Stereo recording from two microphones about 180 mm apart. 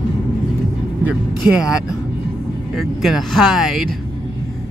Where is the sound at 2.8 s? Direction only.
Centre (ahead or behind).